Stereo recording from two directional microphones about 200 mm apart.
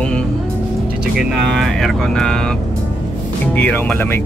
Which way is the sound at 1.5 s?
Centre (ahead or behind).